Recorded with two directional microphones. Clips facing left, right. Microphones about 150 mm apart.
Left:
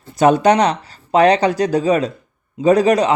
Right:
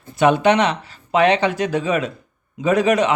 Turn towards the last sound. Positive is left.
turn(degrees=35)  # may be behind; listen again after turning